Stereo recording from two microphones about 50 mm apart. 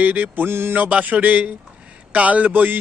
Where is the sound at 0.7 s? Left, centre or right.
Right.